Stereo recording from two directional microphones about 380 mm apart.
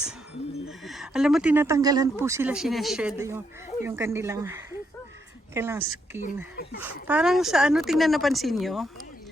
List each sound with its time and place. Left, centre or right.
0.9 s speech: centre
6.2 s speech: left
6.8 s speech: centre